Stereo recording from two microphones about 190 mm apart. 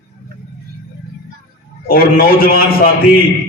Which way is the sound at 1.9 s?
50° left (ahead or behind).